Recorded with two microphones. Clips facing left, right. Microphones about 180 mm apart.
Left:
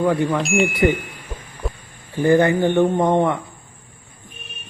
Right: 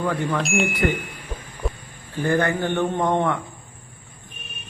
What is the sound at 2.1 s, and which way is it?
Speech, 15° left (ahead or behind).